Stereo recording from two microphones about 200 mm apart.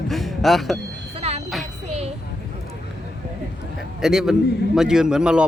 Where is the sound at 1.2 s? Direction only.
30° right (ahead or behind).